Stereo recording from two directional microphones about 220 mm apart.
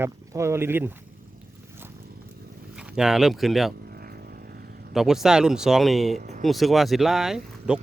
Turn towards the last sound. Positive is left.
turn(degrees=0)  # may be behind; listen again after turning